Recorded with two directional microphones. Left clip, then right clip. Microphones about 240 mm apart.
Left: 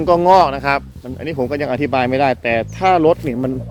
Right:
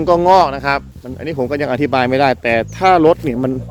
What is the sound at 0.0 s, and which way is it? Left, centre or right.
Speech, centre.